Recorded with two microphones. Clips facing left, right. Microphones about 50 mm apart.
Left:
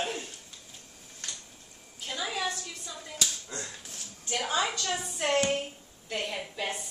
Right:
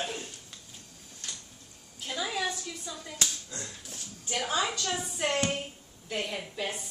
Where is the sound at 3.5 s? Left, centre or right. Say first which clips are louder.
Left 2 dB; left.